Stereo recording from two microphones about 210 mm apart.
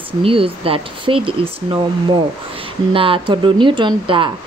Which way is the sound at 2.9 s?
25° right (ahead or behind).